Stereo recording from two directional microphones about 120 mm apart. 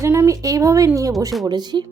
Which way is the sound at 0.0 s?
20° right (ahead or behind).